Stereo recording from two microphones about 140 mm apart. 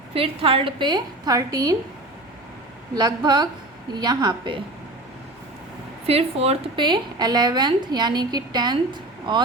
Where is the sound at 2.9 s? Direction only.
30° right (ahead or behind).